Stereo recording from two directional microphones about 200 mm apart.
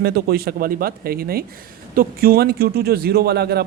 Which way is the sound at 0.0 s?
50° right (ahead or behind).